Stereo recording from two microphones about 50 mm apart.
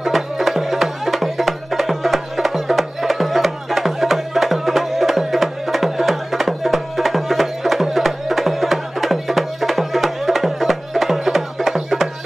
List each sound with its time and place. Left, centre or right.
0.0 s music: centre